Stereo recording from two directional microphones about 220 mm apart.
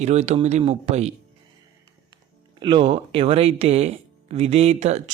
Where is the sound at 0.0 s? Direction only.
30° right (ahead or behind).